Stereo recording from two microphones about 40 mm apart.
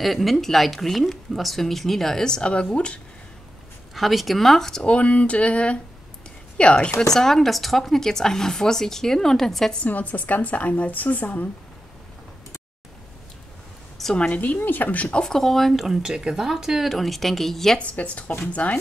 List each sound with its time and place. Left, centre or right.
0.0 s speech: centre; by 3.0 s left
3.9 s speech: centre
4.8 s a woman's voice: left
7.0 s speech: centre
9.8 s a woman's voice: left
14.1 s a woman's voice: left
14.6 s speech: left
15.1 s speech: centre
15.8 s speech: centre
17.7 s a woman's voice: left